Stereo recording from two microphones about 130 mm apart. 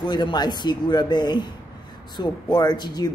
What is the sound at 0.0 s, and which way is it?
Speech, 35° left (ahead or behind).